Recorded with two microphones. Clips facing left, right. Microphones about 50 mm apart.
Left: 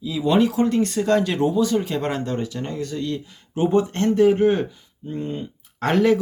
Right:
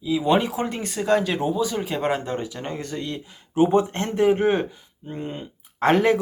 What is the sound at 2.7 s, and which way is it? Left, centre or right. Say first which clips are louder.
Speech: left 5 dB; right.